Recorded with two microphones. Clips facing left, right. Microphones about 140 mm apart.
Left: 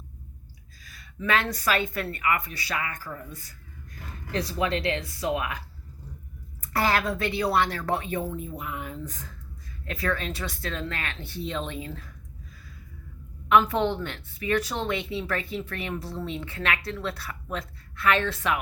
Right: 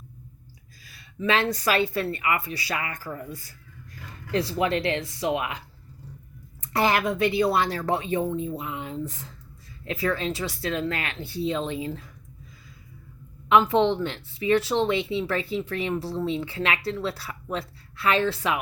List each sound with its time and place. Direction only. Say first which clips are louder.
0.9 s a woman's voice: right 2 dB; 25° right (ahead or behind)
4.3 s a woman's voice: right 3 dB; 30° right (ahead or behind)
10.8 s a woman's voice: right 5 dB; 15° right (ahead or behind)
13.5 s a woman's voice: right 2 dB; 25° right (ahead or behind)